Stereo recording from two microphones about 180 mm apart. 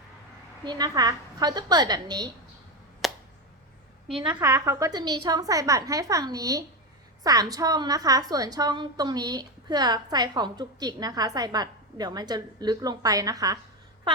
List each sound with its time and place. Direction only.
0.6 s a woman's voice: 25° right (ahead or behind)
3.0 s a sound: centre (ahead or behind)
4.4 s a woman's voice: 15° right (ahead or behind)